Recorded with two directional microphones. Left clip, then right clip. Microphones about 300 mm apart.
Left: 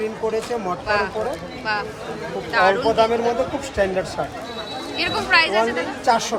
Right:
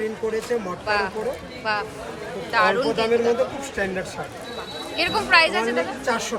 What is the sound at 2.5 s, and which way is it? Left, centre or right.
Speech, centre.